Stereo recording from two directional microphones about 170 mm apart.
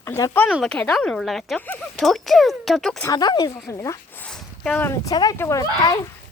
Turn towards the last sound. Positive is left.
turn(degrees=20)  # may be behind; listen again after turning